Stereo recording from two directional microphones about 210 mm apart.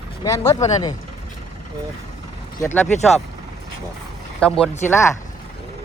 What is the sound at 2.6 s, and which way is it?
Speech, 10° left (ahead or behind).